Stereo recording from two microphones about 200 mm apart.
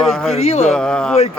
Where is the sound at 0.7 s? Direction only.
5° left (ahead or behind).